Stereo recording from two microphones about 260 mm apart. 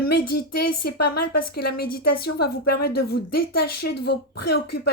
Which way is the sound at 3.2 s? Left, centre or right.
Left.